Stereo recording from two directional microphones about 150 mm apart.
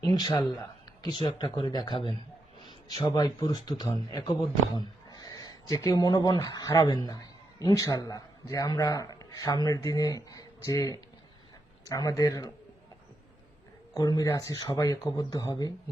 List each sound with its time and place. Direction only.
0.0 s a sound: 30° left (ahead or behind)
1.1 s speech: 35° left (ahead or behind)
13.9 s speech: 25° left (ahead or behind)